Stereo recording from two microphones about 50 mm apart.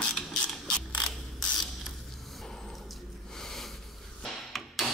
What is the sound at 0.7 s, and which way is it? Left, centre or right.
Mechanisms, centre.